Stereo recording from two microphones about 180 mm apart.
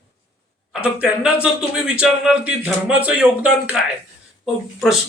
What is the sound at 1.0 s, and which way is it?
Speech, 5° right (ahead or behind).